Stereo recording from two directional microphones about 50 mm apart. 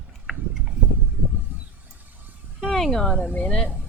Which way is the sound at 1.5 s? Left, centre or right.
Right.